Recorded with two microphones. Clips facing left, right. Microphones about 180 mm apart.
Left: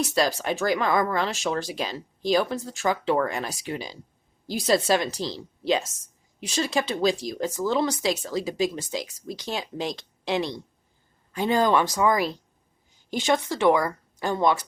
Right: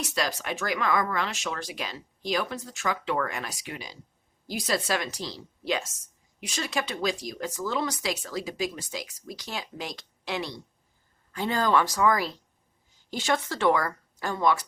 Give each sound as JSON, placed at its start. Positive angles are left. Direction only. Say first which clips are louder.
{"t": 0.1, "sound": "a woman's voice", "louder": "left 6 dB", "side_deg": 30}